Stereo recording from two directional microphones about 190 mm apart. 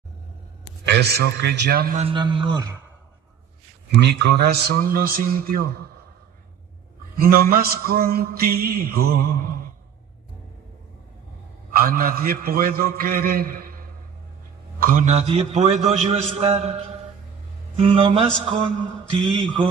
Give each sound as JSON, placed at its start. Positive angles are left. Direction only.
{"t": 0.8, "sound": "a man's voice", "side_deg": -60}
{"t": 2.0, "sound": "mantra", "side_deg": -25}
{"t": 4.0, "sound": "mantra", "side_deg": -60}
{"t": 7.2, "sound": "mantra", "side_deg": -50}
{"t": 11.7, "sound": "mantra", "side_deg": -50}
{"t": 14.8, "sound": "a man's voice", "side_deg": -45}
{"t": 17.7, "sound": "mantra", "side_deg": -30}